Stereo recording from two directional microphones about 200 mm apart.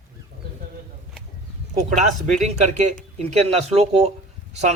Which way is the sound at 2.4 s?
35° right (ahead or behind).